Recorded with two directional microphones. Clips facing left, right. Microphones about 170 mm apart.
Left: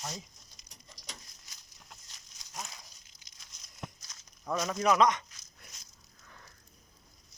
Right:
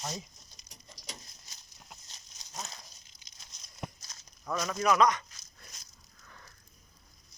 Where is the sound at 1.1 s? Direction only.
25° right (ahead or behind).